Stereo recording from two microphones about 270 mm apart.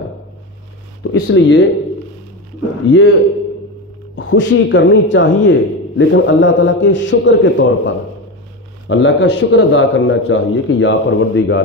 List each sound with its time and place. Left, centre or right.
1.0 s a man's voice: left
2.9 s a man's voice: left
4.1 s a man's voice: left